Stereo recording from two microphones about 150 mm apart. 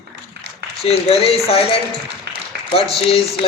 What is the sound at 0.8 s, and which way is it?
Speech, 40° left (ahead or behind).